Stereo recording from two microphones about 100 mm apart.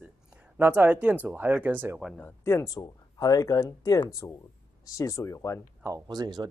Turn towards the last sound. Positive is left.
turn(degrees=-45)  # may be behind; listen again after turning